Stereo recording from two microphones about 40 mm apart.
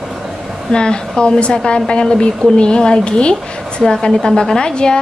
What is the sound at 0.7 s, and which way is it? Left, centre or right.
A woman's voice, left.